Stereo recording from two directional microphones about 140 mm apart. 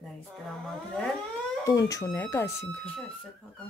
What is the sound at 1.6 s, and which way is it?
Speech, 25° left (ahead or behind).